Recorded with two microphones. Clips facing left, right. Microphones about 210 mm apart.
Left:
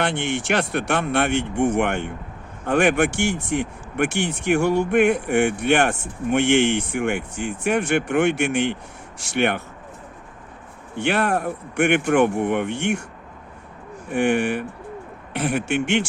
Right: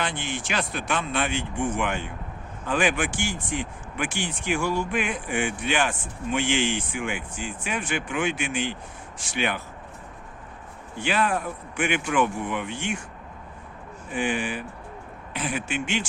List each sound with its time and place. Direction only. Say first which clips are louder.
0.0 s speech: left 7 dB; 65° left (ahead or behind)
10.9 s speech: left 4 dB; 65° left (ahead or behind)
14.1 s speech: left 7 dB; 65° left (ahead or behind)